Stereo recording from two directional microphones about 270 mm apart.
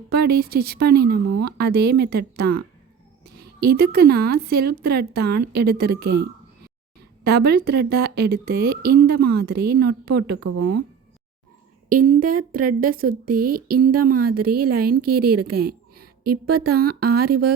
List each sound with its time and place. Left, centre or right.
0.1 s a woman's voice: right
7.3 s a woman's voice: right
11.9 s a woman's voice: right